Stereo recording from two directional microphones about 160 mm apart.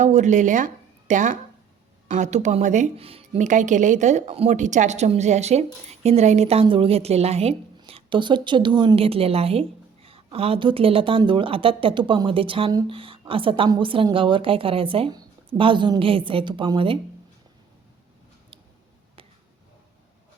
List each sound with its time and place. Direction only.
0.0 s a woman's voice: 50° right (ahead or behind)